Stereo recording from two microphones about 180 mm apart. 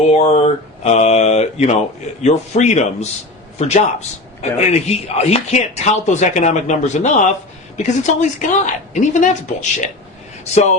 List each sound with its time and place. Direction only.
0.1 s speech: 35° left (ahead or behind)